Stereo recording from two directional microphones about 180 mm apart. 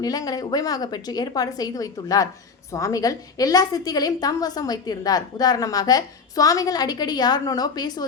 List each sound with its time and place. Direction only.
0.0 s a woman's voice: 20° left (ahead or behind)